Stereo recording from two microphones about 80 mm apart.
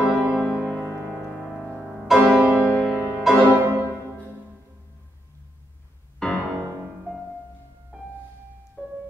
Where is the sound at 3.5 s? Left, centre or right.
Right.